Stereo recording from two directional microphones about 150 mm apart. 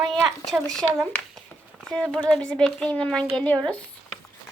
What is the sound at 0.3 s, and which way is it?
A child's voice, centre (ahead or behind).